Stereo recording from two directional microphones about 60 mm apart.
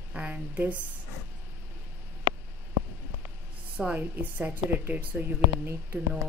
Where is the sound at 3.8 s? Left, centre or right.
Right.